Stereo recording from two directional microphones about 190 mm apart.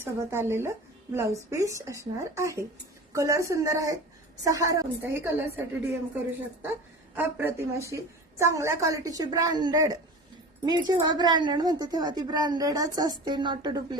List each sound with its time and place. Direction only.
0.0 s a woman's voice: 15° right (ahead or behind)
7.2 s a woman's voice: 10° right (ahead or behind)